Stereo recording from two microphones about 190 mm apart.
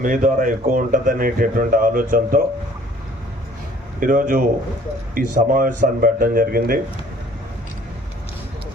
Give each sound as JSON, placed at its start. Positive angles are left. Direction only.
{"t": 0.0, "sound": "speech", "side_deg": -45}
{"t": 4.0, "sound": "speech", "side_deg": -45}